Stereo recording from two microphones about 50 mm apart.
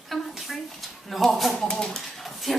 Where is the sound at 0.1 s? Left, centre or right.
Centre.